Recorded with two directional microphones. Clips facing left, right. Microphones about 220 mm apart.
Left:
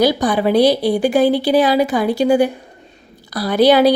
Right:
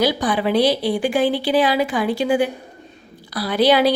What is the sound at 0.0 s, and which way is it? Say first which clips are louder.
A woman's voice: left 4 dB; 45° left (ahead or behind).